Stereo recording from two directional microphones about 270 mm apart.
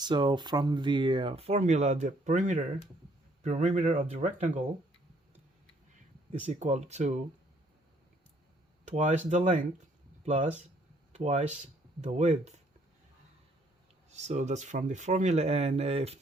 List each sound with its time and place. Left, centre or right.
0.0 s speech: centre
6.4 s speech: right
8.8 s speech: right
14.1 s speech: right